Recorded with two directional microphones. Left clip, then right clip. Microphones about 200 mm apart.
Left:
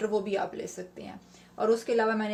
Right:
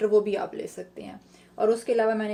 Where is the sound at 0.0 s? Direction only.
30° right (ahead or behind).